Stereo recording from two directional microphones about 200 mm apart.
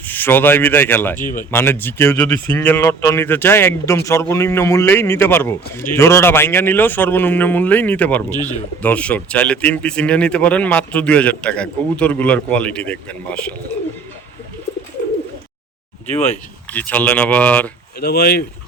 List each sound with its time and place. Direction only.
0.0 s speech: 10° left (ahead or behind)
16.7 s speech: 10° left (ahead or behind)
18.0 s speech: 50° left (ahead or behind)